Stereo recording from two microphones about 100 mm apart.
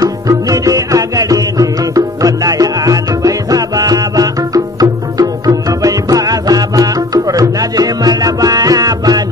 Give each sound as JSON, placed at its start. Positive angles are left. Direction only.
{"t": 0.0, "sound": "music", "side_deg": -35}